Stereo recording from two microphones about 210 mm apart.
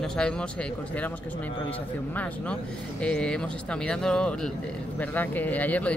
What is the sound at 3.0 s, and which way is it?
Speech, 5° left (ahead or behind).